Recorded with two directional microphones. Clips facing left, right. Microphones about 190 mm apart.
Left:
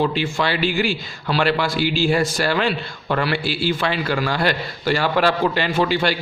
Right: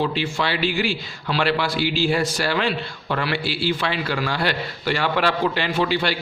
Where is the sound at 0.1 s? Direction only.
50° left (ahead or behind).